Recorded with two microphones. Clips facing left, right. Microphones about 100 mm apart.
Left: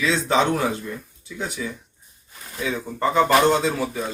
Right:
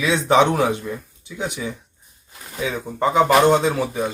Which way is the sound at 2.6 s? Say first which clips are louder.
Right 2 dB; 10° right (ahead or behind).